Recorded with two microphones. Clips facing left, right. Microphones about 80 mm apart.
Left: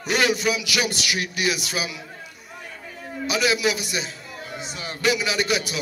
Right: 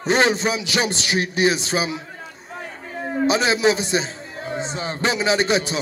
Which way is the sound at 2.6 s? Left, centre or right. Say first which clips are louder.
Right 8 dB; right.